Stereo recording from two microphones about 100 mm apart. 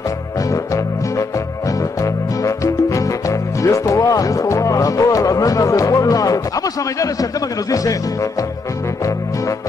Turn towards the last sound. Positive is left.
turn(degrees=35)  # may be behind; listen again after turning